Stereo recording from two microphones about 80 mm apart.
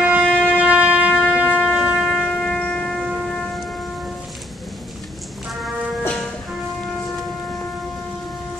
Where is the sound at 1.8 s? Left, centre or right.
Centre.